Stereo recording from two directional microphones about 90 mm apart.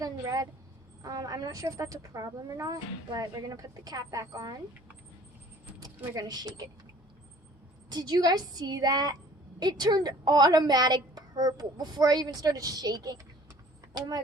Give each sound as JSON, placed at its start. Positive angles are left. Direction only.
{"t": 0.0, "sound": "a woman's voice", "side_deg": -40}
{"t": 6.1, "sound": "a woman's voice", "side_deg": -45}
{"t": 7.9, "sound": "a woman's voice", "side_deg": -50}